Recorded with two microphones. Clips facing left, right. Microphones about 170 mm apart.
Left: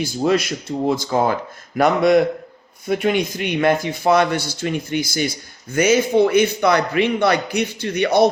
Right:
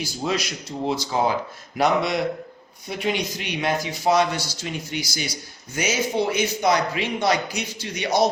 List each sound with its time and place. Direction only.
0.0 s a man's voice: 55° left (ahead or behind)